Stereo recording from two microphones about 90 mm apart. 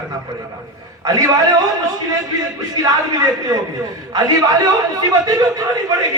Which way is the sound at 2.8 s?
45° right (ahead or behind).